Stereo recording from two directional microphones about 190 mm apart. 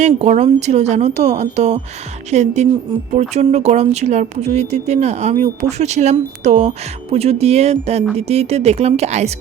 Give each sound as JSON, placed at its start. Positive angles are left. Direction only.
{"t": 0.0, "sound": "speech", "side_deg": -35}